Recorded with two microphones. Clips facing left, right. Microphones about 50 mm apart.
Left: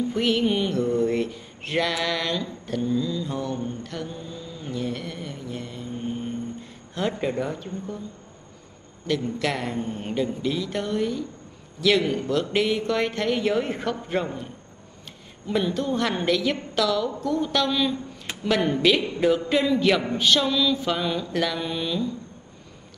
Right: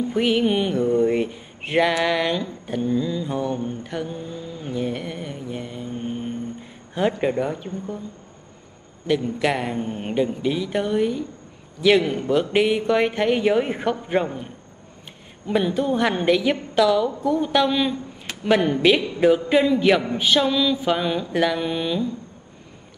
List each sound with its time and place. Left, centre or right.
0.1 s a man's voice: centre
2.0 s mantra: centre
7.3 s a man's voice: centre
9.0 s a man's voice: centre